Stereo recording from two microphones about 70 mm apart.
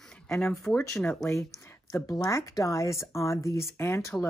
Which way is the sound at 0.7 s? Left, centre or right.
Left.